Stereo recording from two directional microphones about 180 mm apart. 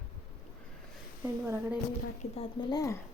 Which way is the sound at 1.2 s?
15° right (ahead or behind).